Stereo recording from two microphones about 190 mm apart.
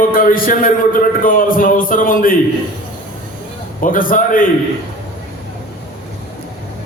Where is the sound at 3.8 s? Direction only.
45° left (ahead or behind).